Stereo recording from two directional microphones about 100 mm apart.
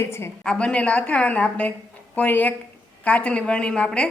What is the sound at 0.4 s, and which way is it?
A woman's voice, 10° left (ahead or behind).